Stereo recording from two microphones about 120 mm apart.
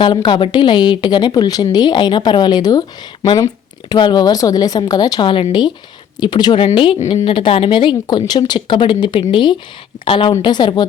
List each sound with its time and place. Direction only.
0.0 s a woman's voice: 40° left (ahead or behind)